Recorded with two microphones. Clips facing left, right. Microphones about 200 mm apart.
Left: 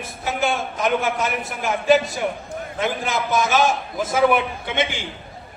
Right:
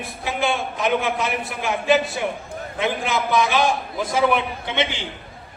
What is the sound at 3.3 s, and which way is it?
Speech, 45° left (ahead or behind).